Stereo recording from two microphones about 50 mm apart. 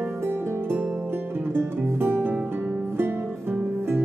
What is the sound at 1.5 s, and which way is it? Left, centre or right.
Music, right.